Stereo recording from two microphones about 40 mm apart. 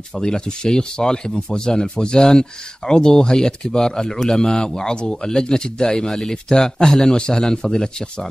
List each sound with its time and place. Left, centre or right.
0.2 s a man's voice: centre